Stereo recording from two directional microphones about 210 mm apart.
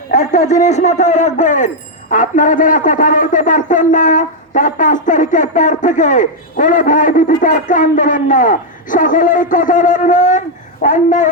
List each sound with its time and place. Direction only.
0.1 s a man's voice: 35° left (ahead or behind)